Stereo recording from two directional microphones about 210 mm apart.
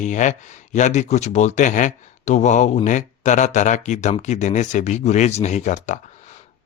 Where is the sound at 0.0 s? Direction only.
35° left (ahead or behind).